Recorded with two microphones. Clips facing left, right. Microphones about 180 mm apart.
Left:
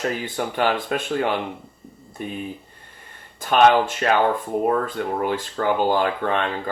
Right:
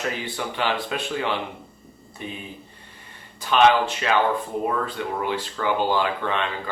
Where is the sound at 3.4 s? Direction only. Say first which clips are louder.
Left 2 dB; 50° left (ahead or behind).